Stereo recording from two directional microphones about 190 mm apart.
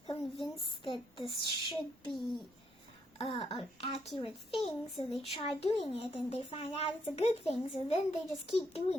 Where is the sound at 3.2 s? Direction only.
25° left (ahead or behind).